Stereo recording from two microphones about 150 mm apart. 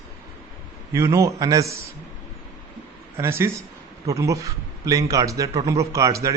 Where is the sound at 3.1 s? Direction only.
20° right (ahead or behind).